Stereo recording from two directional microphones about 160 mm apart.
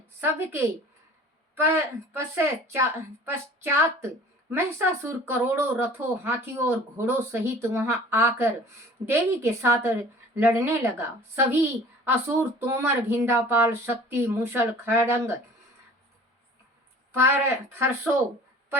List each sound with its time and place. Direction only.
0.2 s a woman's voice: 15° right (ahead or behind)
17.1 s a woman's voice: 15° right (ahead or behind)